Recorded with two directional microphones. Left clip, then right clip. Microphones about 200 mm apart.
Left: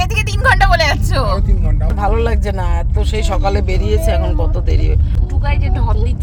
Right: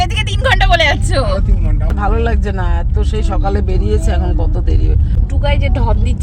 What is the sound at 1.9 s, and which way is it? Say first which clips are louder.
Speech: even; 10° right (ahead or behind).